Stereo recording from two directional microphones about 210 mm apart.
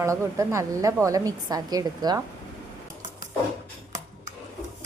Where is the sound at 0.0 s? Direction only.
15° right (ahead or behind).